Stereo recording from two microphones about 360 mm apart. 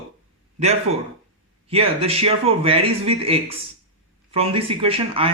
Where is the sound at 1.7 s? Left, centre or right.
Centre.